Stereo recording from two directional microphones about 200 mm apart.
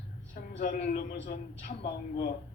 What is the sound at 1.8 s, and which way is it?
Speech, 55° left (ahead or behind).